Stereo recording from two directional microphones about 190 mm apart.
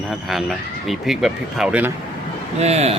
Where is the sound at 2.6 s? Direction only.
35° right (ahead or behind).